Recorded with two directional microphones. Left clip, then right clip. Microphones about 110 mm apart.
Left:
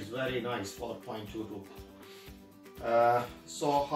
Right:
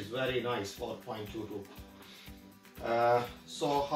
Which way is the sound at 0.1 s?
Centre (ahead or behind).